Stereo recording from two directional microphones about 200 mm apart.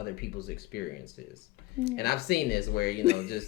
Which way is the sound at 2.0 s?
50° left (ahead or behind).